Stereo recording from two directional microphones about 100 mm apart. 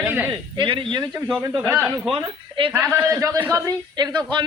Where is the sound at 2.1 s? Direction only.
60° right (ahead or behind).